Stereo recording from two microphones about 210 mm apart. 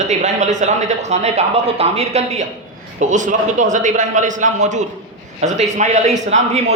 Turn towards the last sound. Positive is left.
turn(degrees=-30)  # may be behind; listen again after turning